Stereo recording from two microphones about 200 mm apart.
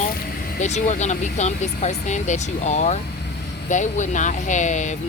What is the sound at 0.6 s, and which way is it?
Speech, 35° left (ahead or behind).